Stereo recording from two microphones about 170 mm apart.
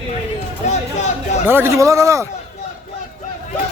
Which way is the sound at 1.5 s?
15° right (ahead or behind).